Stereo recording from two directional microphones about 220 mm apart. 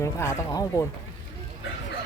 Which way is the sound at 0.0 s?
10° left (ahead or behind).